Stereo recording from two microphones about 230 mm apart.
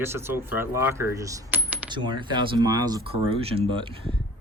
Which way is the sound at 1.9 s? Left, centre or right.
Centre.